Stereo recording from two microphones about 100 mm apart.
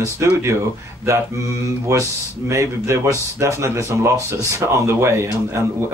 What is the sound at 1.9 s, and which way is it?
Speech, 30° right (ahead or behind).